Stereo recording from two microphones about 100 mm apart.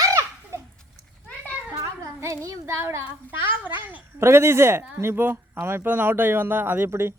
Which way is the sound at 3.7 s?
55° left (ahead or behind).